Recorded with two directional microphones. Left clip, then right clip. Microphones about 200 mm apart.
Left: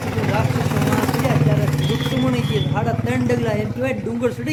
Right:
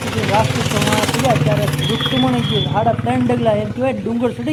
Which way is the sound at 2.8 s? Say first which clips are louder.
Right 8 dB; 15° right (ahead or behind).